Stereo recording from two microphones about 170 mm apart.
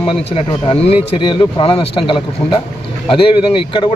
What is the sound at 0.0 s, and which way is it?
Speech, 30° left (ahead or behind).